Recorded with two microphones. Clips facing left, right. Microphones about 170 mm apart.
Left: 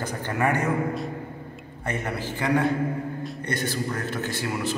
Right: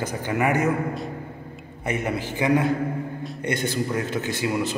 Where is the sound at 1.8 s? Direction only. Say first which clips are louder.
Right 3 dB; 15° right (ahead or behind).